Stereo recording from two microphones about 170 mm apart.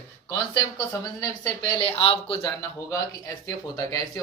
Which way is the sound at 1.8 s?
35° left (ahead or behind).